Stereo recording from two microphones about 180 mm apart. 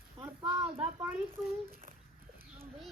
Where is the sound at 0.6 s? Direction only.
10° right (ahead or behind).